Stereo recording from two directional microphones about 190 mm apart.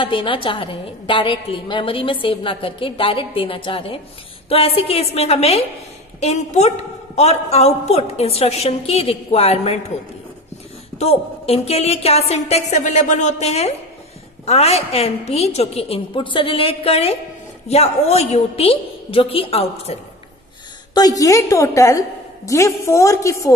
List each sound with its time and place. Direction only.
0.0 s a woman's voice: 25° left (ahead or behind)
11.0 s a woman's voice: 35° left (ahead or behind)
20.9 s a woman's voice: 20° left (ahead or behind)